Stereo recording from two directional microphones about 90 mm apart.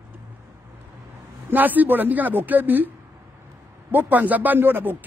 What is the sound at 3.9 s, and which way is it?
Speech, 20° right (ahead or behind).